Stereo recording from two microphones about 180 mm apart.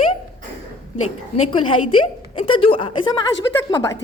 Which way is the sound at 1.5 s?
30° left (ahead or behind).